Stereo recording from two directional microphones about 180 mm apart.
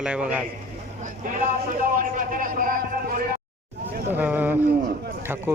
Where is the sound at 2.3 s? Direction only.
50° right (ahead or behind).